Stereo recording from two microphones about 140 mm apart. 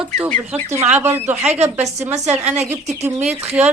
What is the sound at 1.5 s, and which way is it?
Speech, 50° right (ahead or behind).